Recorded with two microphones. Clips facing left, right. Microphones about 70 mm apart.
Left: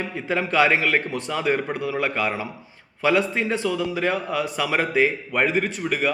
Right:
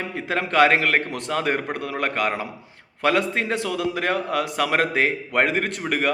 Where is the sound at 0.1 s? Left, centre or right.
Right.